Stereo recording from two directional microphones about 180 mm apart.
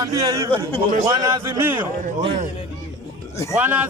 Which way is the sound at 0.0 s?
20° right (ahead or behind).